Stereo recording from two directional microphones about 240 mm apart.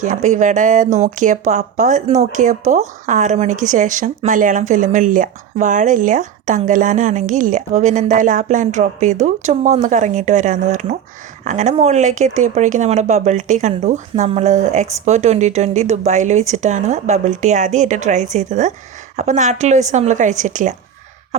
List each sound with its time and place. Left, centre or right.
0.0 s speech: right